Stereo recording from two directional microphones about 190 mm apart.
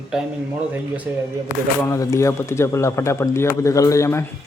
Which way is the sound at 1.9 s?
15° left (ahead or behind).